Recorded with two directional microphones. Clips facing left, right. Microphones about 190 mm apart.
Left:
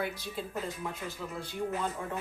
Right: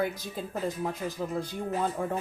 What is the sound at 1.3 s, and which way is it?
Speech, 40° right (ahead or behind).